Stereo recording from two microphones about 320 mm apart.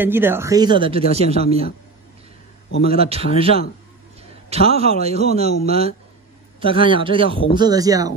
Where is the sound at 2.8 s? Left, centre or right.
Centre.